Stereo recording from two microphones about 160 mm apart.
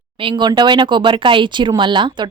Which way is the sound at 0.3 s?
30° right (ahead or behind).